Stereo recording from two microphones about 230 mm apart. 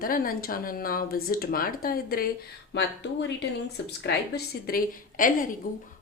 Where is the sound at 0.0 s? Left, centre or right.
Left.